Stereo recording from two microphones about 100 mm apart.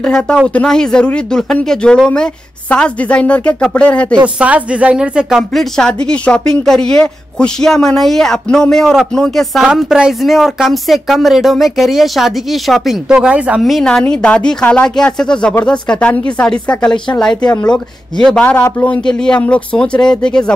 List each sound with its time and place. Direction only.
0.0 s speech: 10° left (ahead or behind)
4.4 s a woman's voice: 10° right (ahead or behind)
5.5 s speech: 5° left (ahead or behind); by 13.6 s 10° right (ahead or behind)
13.7 s speech: centre (ahead or behind)
18.4 s a man's voice: 20° left (ahead or behind)